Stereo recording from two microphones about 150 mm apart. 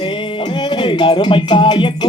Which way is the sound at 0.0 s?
30° left (ahead or behind).